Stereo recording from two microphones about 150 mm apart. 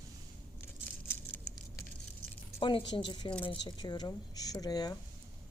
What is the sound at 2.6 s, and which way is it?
A woman's voice, 35° left (ahead or behind).